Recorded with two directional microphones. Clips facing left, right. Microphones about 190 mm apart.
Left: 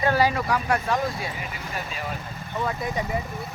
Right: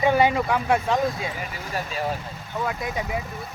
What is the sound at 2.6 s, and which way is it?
Speech, centre (ahead or behind).